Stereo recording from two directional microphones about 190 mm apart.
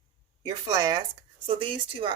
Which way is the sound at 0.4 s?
20° right (ahead or behind).